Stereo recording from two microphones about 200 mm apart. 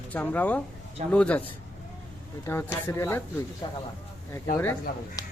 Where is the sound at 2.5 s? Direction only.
15° left (ahead or behind).